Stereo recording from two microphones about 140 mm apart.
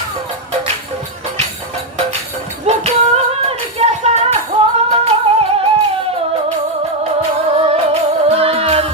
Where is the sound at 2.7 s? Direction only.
50° right (ahead or behind).